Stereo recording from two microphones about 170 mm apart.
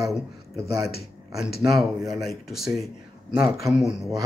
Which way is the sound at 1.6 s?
Centre (ahead or behind).